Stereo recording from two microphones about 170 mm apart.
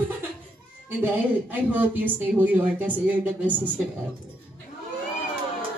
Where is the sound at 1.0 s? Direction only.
10° right (ahead or behind).